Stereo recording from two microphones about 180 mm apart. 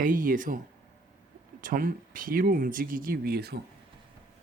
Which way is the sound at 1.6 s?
50° right (ahead or behind).